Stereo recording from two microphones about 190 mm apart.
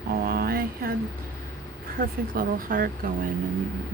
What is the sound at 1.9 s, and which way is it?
Speech, 50° right (ahead or behind).